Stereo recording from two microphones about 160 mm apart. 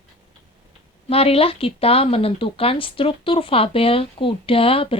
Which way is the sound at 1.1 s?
35° left (ahead or behind).